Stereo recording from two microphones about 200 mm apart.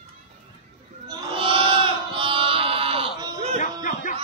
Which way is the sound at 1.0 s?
25° right (ahead or behind).